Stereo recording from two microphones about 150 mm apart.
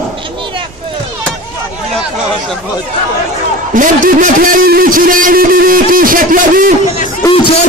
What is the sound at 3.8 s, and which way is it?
Speech, 65° right (ahead or behind).